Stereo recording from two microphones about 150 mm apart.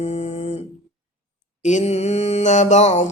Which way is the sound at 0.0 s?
45° left (ahead or behind).